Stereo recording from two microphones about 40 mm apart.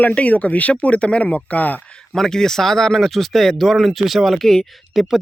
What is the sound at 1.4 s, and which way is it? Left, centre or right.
Speech, left.